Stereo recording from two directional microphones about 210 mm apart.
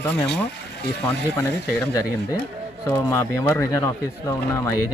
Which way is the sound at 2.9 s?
10° left (ahead or behind).